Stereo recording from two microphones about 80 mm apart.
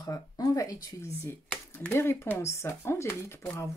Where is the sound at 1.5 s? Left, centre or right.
Left.